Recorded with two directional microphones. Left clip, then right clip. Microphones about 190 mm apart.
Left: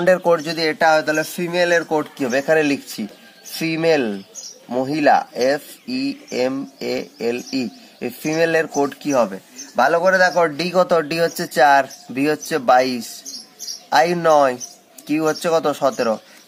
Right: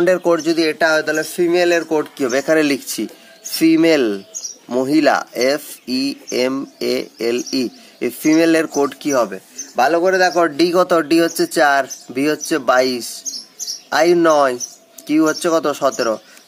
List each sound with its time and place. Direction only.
0.0 s speech: 15° right (ahead or behind)